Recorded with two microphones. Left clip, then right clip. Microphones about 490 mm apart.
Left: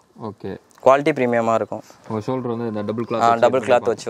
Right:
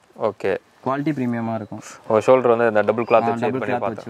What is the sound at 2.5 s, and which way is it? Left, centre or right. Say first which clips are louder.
Speech: right 9 dB; right.